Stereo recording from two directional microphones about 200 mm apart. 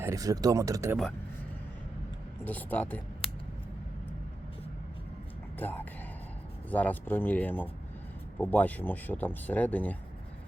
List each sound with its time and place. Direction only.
0.0 s speech: 15° right (ahead or behind)
2.4 s speech: 10° left (ahead or behind)
3.2 s scissors: 30° left (ahead or behind)
5.5 s speech: 10° left (ahead or behind)